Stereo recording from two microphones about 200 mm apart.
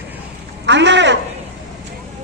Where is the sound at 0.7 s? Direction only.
60° right (ahead or behind).